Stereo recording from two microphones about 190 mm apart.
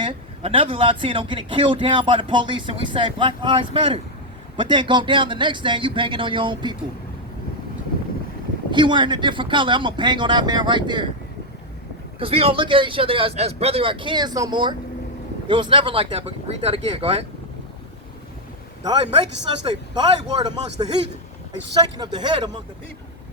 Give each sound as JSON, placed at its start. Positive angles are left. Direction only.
{"t": 0.0, "sound": "a man's voice", "side_deg": -30}
{"t": 8.7, "sound": "a man's voice", "side_deg": -25}
{"t": 12.2, "sound": "a man's voice", "side_deg": -30}
{"t": 18.8, "sound": "a man's voice", "side_deg": -20}